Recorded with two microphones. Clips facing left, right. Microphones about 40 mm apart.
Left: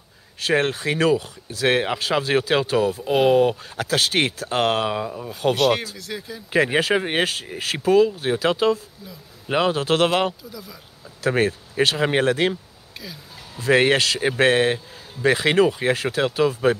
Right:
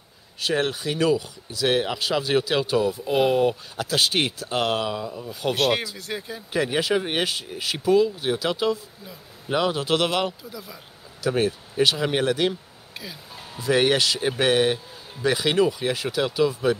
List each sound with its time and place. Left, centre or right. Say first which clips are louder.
0.5 s speech: left 4 dB; left
3.8 s speech: left 2 dB; left
5.5 s speech: left 3 dB; centre
6.5 s speech: left 4 dB; left
7.0 s speech: left 3 dB; left
7.2 s speech: left 2 dB; left
10.5 s speech: even; centre
11.2 s speech: left 2 dB; left
12.9 s music: even; centre
13.6 s speech: left 3 dB; left